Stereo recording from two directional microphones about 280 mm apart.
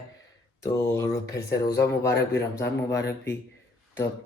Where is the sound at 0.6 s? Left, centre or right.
Centre.